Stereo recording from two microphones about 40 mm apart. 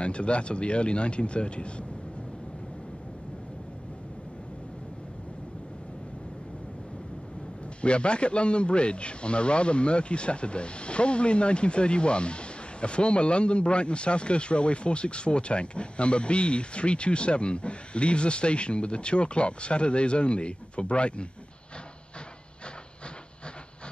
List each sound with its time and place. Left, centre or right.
0.0 s speech: left
7.8 s speech: left